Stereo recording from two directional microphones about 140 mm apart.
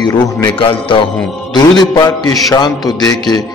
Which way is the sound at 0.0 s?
35° left (ahead or behind).